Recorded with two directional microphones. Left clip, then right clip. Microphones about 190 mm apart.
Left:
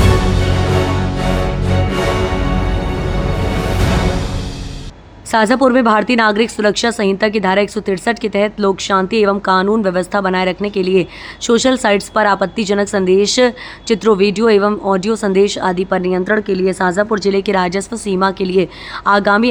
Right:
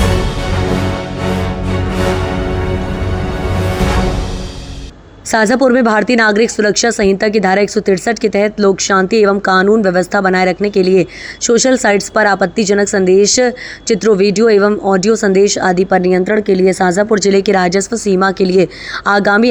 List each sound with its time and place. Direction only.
5.3 s speech: 15° right (ahead or behind)